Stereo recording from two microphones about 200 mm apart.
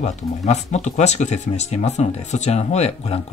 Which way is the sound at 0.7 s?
35° left (ahead or behind).